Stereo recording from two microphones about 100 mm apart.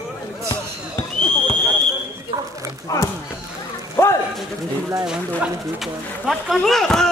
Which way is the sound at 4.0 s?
25° left (ahead or behind).